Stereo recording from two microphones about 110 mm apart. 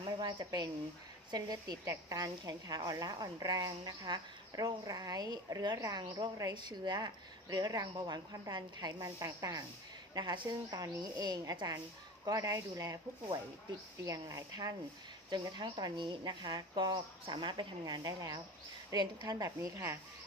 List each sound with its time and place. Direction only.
0.2 s a woman's voice: 40° right (ahead or behind)